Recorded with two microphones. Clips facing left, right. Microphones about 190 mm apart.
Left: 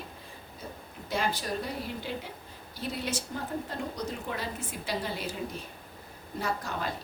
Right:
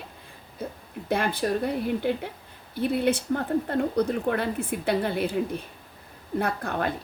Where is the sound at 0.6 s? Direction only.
55° right (ahead or behind).